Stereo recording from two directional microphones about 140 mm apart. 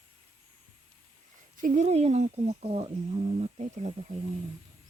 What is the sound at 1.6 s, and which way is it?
Speech, 60° right (ahead or behind).